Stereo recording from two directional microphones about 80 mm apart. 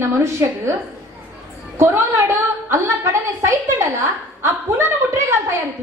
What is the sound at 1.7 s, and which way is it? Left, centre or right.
A woman's voice, right.